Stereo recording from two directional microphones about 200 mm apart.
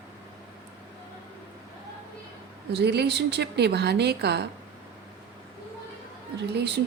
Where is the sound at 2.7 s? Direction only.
55° right (ahead or behind).